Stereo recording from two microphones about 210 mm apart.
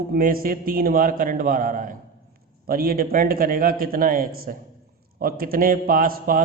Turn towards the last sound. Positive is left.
turn(degrees=-45)  # may be behind; listen again after turning